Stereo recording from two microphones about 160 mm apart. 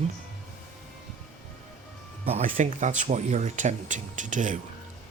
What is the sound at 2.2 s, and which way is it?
Speech, 40° right (ahead or behind).